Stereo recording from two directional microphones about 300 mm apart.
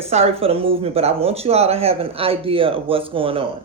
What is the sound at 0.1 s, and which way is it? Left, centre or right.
Speech, centre.